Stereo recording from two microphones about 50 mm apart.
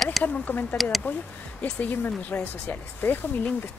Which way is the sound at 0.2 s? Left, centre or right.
Left.